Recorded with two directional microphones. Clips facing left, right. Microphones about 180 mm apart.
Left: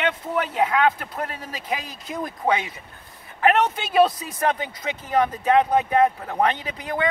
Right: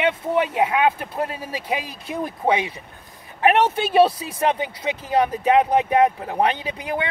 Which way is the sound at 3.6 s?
30° right (ahead or behind).